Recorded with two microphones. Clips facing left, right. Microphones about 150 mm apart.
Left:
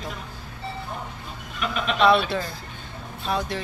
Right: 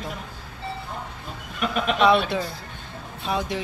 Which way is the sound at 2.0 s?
15° right (ahead or behind).